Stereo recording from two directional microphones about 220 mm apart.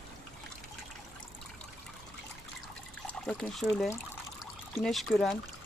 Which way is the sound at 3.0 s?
5° left (ahead or behind).